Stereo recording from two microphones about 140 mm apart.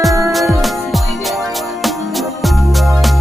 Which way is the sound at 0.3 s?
Centre (ahead or behind).